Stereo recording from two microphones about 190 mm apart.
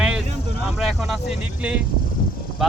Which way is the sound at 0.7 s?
5° right (ahead or behind).